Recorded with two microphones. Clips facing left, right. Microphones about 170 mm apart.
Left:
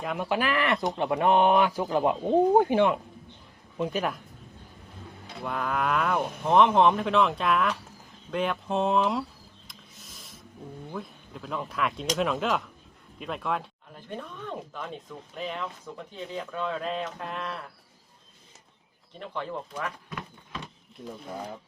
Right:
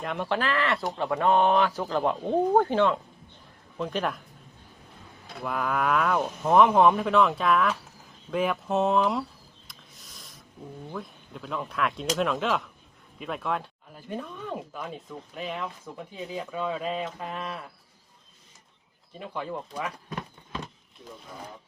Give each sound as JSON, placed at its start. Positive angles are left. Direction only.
{"t": 0.0, "sound": "speech", "side_deg": 5}
{"t": 5.5, "sound": "speech", "side_deg": 0}
{"t": 9.6, "sound": "a sound", "side_deg": 0}
{"t": 10.9, "sound": "speech", "side_deg": 0}
{"t": 19.2, "sound": "speech", "side_deg": -10}
{"t": 20.1, "sound": "a sound", "side_deg": -35}
{"t": 21.0, "sound": "speech", "side_deg": 50}